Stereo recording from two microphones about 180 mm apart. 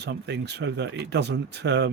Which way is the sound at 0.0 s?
70° right (ahead or behind).